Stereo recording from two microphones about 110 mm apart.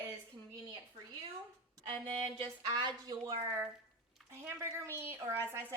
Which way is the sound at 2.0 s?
70° right (ahead or behind).